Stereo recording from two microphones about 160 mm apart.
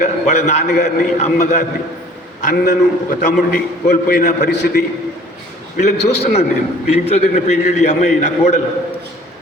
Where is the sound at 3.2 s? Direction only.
50° left (ahead or behind).